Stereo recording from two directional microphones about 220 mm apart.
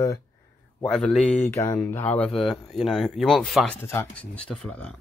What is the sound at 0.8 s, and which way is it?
Speech, 5° left (ahead or behind).